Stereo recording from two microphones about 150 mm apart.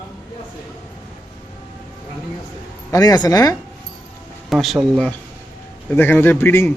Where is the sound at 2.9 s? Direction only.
25° left (ahead or behind).